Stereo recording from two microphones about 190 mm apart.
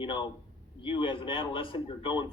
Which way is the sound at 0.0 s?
25° left (ahead or behind).